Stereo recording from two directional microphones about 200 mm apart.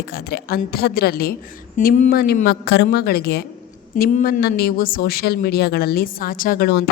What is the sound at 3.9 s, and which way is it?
A woman's voice, 40° left (ahead or behind).